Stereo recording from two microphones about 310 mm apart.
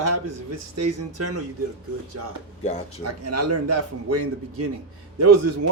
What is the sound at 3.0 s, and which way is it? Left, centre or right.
Speech, right.